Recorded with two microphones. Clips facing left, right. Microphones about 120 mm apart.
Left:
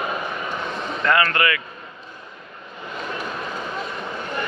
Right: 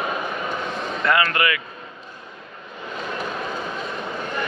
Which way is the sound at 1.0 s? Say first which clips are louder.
Left 1 dB; 20° right (ahead or behind).